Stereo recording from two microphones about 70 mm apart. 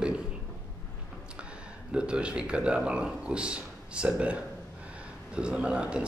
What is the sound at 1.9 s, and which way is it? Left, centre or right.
Speech, centre.